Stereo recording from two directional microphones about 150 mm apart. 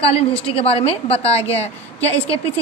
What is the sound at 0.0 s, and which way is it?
A woman's voice, 40° left (ahead or behind).